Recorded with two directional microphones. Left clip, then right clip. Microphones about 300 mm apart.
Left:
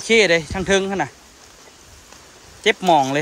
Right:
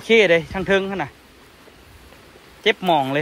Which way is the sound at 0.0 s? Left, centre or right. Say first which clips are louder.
Even; centre.